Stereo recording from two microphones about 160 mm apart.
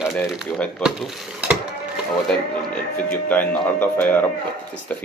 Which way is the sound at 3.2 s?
10° left (ahead or behind).